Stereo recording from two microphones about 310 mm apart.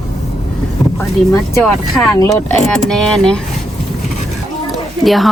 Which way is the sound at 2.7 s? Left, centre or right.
Centre.